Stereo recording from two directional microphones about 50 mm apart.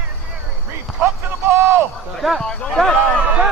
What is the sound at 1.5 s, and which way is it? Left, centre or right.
Speech, right.